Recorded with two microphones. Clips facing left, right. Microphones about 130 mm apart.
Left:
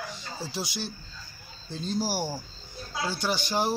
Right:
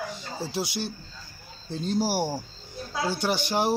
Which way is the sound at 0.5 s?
60° right (ahead or behind).